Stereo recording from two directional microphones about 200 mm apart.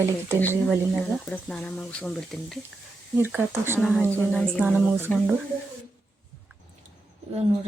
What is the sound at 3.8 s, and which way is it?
Speech, centre (ahead or behind).